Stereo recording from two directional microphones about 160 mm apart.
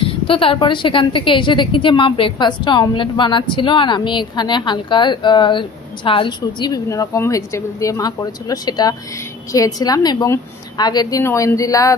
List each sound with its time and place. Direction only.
0.0 s a woman's voice: 35° left (ahead or behind)